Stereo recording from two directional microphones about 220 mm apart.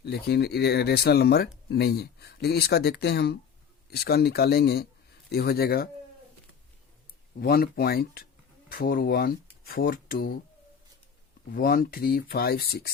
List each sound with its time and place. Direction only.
0.0 s speech: 45° left (ahead or behind)
7.3 s speech: 45° left (ahead or behind)
11.5 s speech: 45° left (ahead or behind)